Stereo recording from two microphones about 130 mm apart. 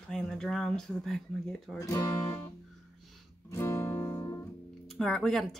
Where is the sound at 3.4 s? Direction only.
20° left (ahead or behind).